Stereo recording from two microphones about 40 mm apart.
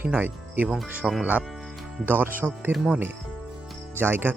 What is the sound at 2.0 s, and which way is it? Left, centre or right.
Speech, right.